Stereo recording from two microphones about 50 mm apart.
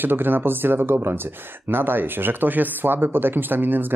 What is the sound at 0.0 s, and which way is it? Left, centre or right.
Speech, right.